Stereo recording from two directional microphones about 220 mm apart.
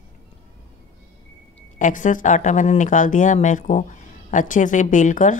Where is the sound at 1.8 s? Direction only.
35° left (ahead or behind).